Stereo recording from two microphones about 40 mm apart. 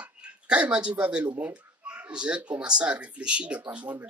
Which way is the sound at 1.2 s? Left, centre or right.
Right.